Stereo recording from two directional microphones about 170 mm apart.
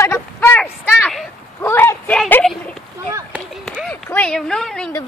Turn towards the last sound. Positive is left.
turn(degrees=5)  # may be behind; listen again after turning